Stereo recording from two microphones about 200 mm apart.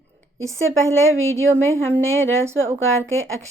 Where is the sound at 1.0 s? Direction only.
80° right.